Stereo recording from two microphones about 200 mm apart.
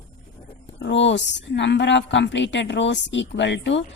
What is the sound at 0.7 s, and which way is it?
A woman's voice, 65° left (ahead or behind).